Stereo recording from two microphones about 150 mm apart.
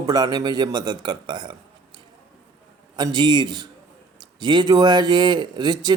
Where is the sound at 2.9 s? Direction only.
30° right (ahead or behind).